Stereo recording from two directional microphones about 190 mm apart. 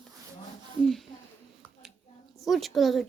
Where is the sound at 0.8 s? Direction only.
Centre (ahead or behind).